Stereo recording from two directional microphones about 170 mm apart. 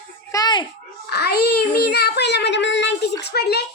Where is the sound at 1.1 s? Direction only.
70° left (ahead or behind).